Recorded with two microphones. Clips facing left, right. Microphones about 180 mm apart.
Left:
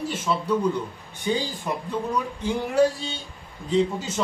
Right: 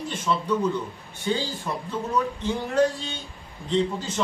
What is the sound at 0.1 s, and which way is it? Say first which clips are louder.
A man's voice: right 1 dB; 10° left (ahead or behind).